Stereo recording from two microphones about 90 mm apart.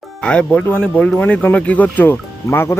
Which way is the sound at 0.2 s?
10° left (ahead or behind).